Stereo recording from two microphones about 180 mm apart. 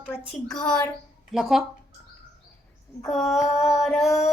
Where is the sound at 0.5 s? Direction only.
5° left (ahead or behind).